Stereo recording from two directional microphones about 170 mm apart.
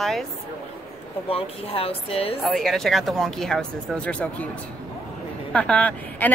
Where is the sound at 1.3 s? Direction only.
35° left (ahead or behind).